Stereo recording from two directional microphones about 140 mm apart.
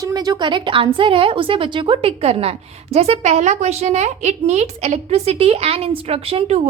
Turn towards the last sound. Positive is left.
turn(degrees=-45)  # may be behind; listen again after turning